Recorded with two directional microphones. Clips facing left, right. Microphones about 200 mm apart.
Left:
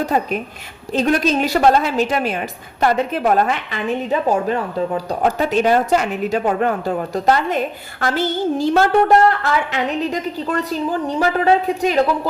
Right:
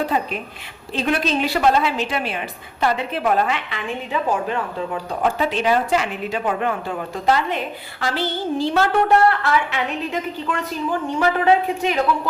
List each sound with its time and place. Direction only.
0.0 s a woman's voice: 45° left (ahead or behind)